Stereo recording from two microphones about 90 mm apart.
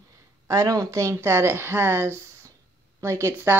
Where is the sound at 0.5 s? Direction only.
40° right (ahead or behind).